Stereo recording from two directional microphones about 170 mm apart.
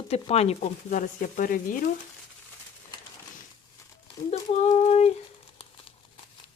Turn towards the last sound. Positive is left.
turn(degrees=40)  # may be behind; listen again after turning